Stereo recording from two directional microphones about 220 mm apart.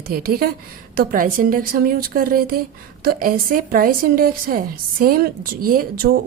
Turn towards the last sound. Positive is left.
turn(degrees=-40)  # may be behind; listen again after turning